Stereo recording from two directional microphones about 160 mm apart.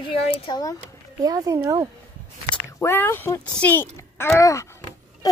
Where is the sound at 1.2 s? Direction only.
20° right (ahead or behind).